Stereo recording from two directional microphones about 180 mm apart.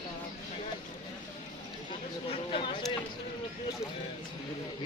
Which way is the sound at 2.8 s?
Centre (ahead or behind).